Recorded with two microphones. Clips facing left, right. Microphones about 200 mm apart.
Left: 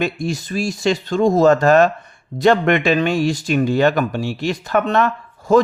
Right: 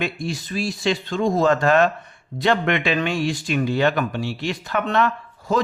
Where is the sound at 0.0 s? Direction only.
45° left (ahead or behind).